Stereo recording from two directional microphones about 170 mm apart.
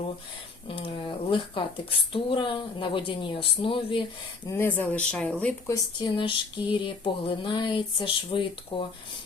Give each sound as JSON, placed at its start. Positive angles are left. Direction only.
{"t": 0.7, "sound": "speech", "side_deg": 30}
{"t": 4.4, "sound": "speech", "side_deg": 15}
{"t": 5.6, "sound": "speech", "side_deg": 25}